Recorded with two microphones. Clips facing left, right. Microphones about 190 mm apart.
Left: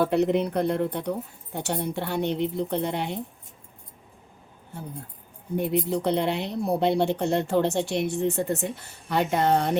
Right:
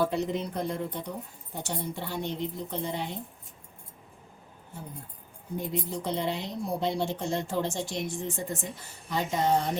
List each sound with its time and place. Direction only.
0.0 s a woman's voice: 65° left (ahead or behind)
5.5 s speech: 65° left (ahead or behind)